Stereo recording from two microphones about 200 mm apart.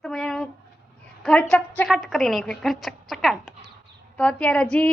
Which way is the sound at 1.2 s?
5° left (ahead or behind).